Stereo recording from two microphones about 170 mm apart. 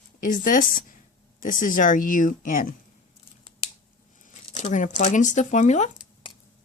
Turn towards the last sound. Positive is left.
turn(degrees=40)  # may be behind; listen again after turning